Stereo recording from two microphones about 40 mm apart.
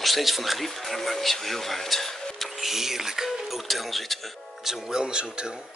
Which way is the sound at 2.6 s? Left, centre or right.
Centre.